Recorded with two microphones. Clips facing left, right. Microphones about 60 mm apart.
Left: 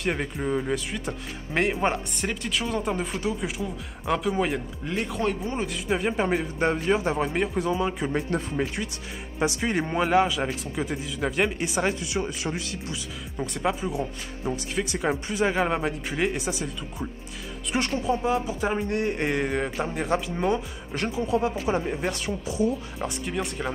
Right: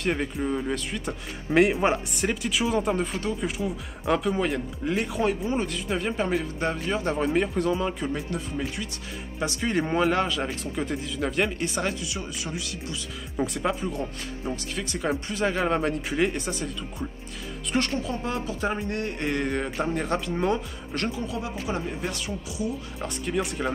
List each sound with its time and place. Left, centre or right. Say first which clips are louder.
0.0 s speech: right 1 dB; centre; by 7.0 s left
7.0 s speech: right 1 dB; centre
8.1 s speech: left 3 dB; left
9.4 s speech: left 1 dB; centre
11.6 s speech: left 2 dB; centre
11.9 s speech: left 4 dB; left
13.5 s speech: left 1 dB; centre
13.8 s speech: left 1 dB; centre
21.3 s speech: left 6 dB; left
22.9 s speech: right 1 dB; centre